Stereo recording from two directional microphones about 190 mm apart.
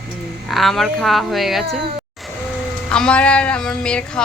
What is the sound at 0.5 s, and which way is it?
Speech, centre (ahead or behind).